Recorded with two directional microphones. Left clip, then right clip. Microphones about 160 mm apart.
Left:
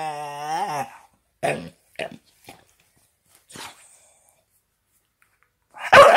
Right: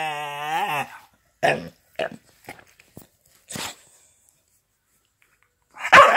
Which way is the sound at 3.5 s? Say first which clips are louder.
Right 6 dB; 35° right (ahead or behind).